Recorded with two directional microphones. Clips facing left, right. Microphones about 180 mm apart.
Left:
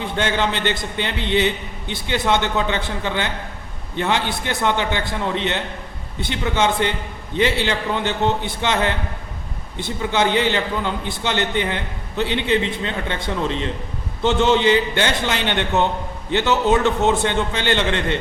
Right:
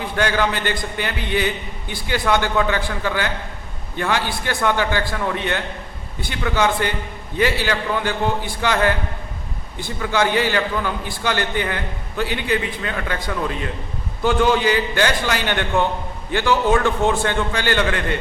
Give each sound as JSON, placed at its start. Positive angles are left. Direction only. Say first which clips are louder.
{"t": 0.0, "sound": "a man's voice", "louder": "right 1 dB", "side_deg": 25}